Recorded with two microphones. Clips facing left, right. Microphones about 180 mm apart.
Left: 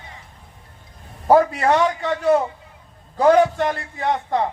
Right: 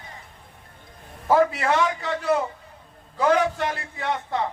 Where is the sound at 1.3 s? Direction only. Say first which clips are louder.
Left 4 dB; 40° left (ahead or behind).